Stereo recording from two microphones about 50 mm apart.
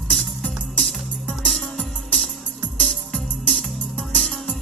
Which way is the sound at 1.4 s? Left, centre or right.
Centre.